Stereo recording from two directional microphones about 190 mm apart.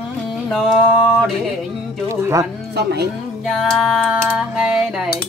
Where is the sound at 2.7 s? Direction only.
60° right (ahead or behind).